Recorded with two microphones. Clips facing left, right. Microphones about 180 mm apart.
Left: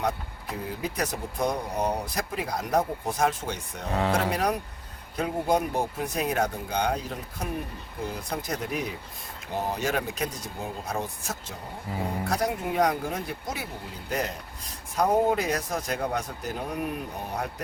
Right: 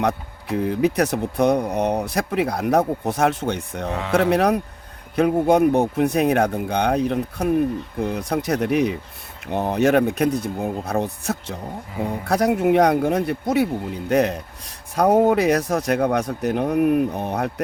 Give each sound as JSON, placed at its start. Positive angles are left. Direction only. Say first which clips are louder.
{"t": 0.4, "sound": "speech", "louder": "right 13 dB", "side_deg": -70}